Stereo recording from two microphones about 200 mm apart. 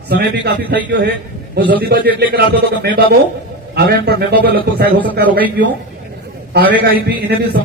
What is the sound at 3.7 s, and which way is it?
A man's voice, 50° right (ahead or behind).